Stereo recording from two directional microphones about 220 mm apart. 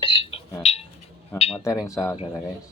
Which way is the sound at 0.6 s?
25° left (ahead or behind).